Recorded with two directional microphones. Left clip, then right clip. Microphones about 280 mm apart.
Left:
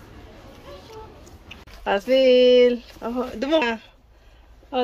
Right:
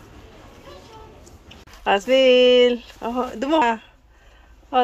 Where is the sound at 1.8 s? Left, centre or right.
Centre.